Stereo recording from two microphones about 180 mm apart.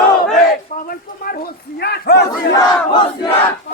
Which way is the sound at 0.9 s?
55° left (ahead or behind).